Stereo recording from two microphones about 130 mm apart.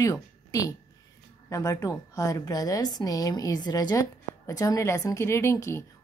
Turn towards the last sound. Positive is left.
turn(degrees=20)  # may be behind; listen again after turning